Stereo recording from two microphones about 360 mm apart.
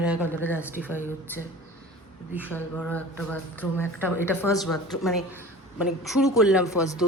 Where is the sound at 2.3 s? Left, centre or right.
Centre.